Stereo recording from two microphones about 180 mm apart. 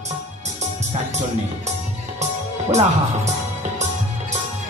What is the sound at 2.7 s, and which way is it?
Speech, 40° right (ahead or behind).